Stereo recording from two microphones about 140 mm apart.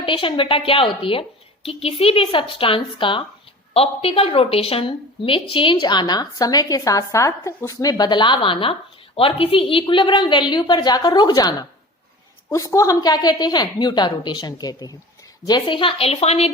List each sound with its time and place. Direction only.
0.0 s a woman's voice: 40° left (ahead or behind)